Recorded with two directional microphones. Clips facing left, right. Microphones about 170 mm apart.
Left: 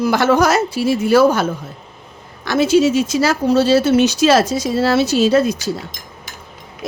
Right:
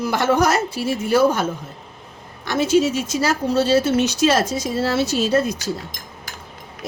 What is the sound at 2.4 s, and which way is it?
Speech, 90° left.